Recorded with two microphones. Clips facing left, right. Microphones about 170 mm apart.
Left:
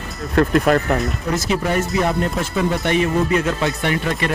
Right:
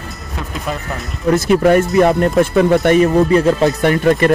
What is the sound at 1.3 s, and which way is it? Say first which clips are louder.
Speech: right 10 dB; 60° right (ahead or behind).